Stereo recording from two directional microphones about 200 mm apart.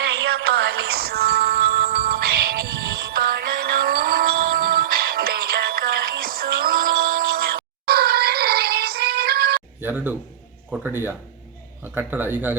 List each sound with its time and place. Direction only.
0.0 s music: 55° right (ahead or behind)
9.8 s speech: 10° right (ahead or behind)